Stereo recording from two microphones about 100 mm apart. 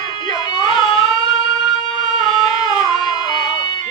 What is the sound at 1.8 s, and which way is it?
Music, 45° left (ahead or behind).